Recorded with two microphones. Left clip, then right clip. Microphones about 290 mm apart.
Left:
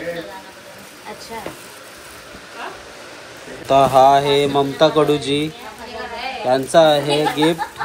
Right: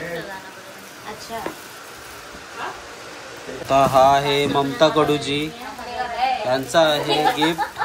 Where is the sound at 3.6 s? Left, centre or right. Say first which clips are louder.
Left 3 dB; centre.